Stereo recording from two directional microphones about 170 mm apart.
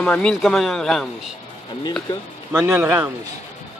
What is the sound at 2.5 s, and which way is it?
Speech, 10° right (ahead or behind).